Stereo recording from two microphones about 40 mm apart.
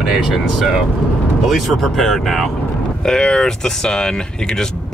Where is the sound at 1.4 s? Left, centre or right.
Centre.